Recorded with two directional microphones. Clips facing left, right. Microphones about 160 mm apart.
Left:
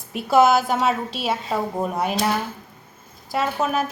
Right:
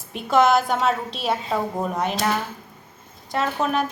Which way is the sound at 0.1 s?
5° left (ahead or behind).